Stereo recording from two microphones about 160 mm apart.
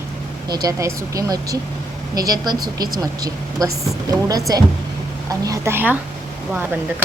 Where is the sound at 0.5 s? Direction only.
20° right (ahead or behind).